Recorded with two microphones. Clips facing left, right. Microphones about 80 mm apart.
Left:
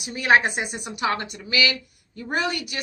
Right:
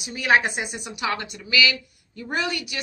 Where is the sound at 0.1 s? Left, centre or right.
Left.